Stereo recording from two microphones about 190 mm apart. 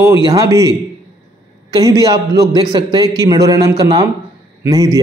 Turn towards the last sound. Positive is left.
turn(degrees=-20)  # may be behind; listen again after turning